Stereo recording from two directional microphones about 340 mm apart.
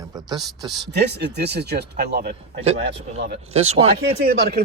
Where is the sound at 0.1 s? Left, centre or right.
Centre.